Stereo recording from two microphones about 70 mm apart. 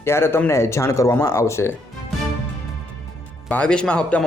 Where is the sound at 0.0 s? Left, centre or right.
Left.